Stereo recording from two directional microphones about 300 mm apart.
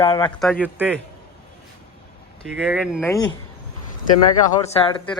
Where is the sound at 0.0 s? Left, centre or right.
Centre.